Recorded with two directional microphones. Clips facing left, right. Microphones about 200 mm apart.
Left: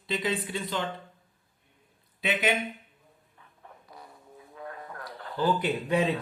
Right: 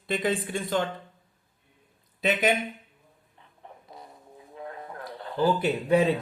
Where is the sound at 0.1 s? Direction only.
50° right (ahead or behind).